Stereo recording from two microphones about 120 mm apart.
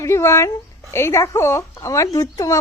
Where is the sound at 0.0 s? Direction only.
20° left (ahead or behind).